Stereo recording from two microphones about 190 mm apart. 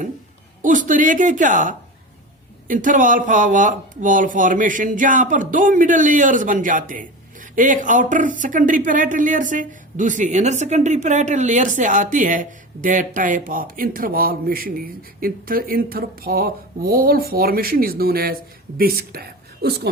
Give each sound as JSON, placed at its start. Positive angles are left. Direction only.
{"t": 0.6, "sound": "a woman's voice", "side_deg": -45}